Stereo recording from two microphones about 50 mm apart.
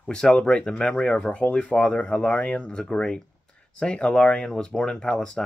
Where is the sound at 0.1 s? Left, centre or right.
Centre.